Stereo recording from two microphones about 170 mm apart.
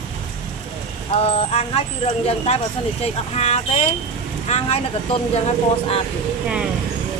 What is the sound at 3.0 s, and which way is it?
Speech, 40° left (ahead or behind).